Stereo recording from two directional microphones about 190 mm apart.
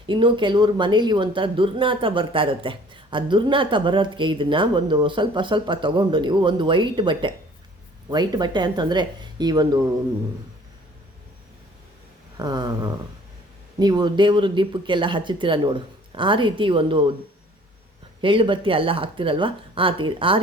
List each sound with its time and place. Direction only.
0.0 s speech: 25° right (ahead or behind)
12.4 s speech: 20° right (ahead or behind)
18.2 s speech: 25° right (ahead or behind)